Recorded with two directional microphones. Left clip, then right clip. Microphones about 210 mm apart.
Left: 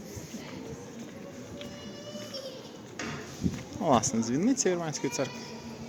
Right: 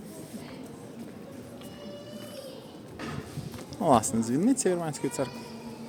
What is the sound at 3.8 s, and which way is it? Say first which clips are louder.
Speech: right 2 dB; 15° right (ahead or behind).